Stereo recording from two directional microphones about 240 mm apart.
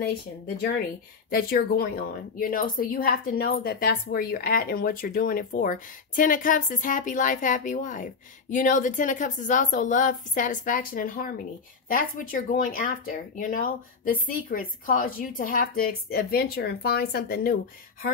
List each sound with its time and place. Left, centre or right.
1.3 s a woman's voice: left